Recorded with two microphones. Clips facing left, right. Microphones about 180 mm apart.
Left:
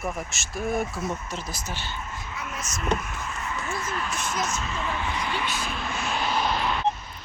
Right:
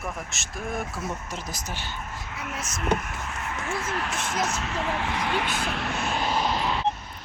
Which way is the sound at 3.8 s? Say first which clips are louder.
Right 1 dB; 75° right (ahead or behind).